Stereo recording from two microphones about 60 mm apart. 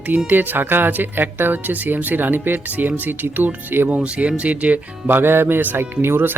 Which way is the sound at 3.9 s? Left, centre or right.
Centre.